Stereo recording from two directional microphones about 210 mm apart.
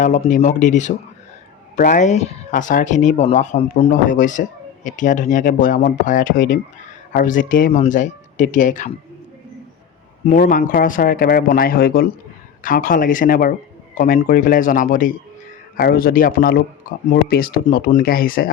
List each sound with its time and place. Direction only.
0.0 s speech: 40° left (ahead or behind)
10.2 s speech: 40° left (ahead or behind)